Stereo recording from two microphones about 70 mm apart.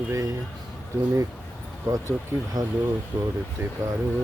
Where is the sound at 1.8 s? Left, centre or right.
Right.